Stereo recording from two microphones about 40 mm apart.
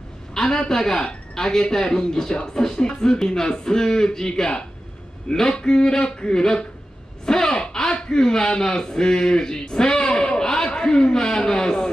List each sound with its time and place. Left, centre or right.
0.3 s a man's voice: centre
7.2 s a sound: centre
8.1 s a man's voice: centre